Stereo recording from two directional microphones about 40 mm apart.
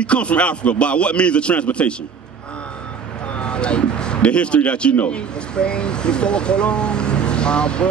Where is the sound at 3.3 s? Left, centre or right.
Left.